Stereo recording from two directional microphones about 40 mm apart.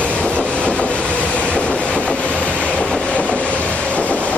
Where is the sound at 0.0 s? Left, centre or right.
Left.